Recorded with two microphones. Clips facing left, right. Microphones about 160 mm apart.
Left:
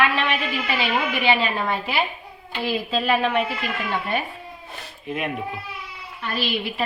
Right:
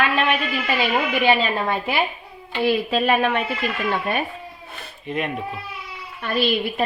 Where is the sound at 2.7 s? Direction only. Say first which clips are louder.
Right 3 dB; 55° right (ahead or behind).